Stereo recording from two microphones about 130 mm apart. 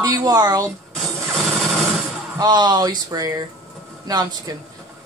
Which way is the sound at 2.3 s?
30° right (ahead or behind).